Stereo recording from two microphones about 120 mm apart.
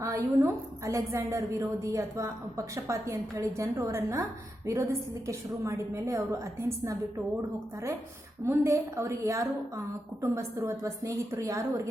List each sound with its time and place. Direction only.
0.0 s a woman's voice: 25° right (ahead or behind)
8.4 s a woman's voice: 25° right (ahead or behind)